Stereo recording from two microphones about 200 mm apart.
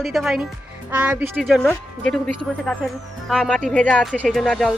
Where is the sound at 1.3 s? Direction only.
Centre (ahead or behind).